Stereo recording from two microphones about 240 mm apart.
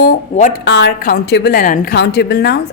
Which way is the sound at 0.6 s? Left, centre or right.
Left.